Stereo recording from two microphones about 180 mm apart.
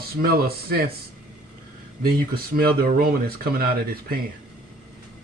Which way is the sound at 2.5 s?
55° right (ahead or behind).